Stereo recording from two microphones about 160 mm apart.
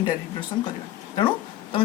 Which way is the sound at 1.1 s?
30° left (ahead or behind).